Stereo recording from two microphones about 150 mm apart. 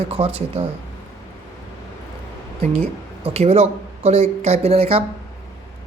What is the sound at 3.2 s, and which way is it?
Speech, 45° right (ahead or behind).